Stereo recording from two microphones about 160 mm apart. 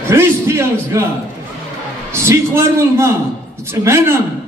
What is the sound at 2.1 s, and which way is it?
A man's voice, 15° right (ahead or behind).